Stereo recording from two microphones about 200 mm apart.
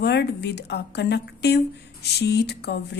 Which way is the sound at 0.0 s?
55° left (ahead or behind).